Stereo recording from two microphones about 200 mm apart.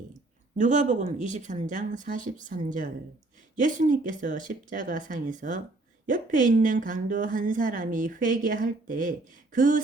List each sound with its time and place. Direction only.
0.5 s a woman's voice: 40° right (ahead or behind)